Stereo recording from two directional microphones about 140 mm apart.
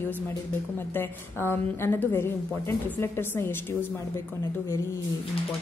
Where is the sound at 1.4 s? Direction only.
15° left (ahead or behind).